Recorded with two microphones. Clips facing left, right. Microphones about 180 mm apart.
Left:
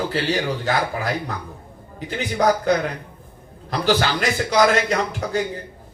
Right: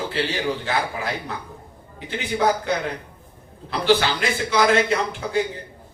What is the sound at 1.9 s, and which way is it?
A man's voice, 40° left (ahead or behind).